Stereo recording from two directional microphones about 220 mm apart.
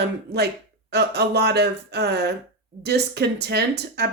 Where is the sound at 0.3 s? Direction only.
50° right (ahead or behind).